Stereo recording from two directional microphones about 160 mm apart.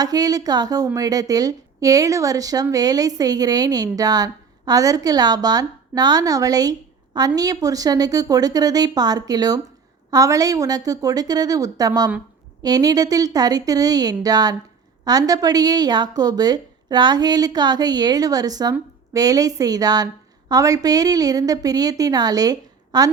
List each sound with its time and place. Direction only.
0.0 s speech: 25° right (ahead or behind)